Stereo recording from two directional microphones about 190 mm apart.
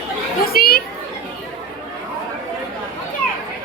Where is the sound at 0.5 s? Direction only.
55° left (ahead or behind).